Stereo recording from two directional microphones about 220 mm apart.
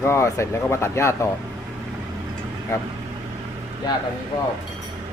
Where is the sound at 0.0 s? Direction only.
10° left (ahead or behind).